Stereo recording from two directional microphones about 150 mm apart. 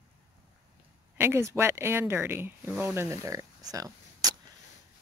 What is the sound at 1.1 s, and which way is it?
Speech, 15° right (ahead or behind).